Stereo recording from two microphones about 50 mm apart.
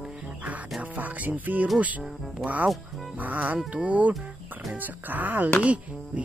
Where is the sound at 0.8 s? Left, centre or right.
Right.